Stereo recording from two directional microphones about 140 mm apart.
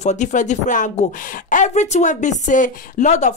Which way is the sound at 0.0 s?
60° left (ahead or behind).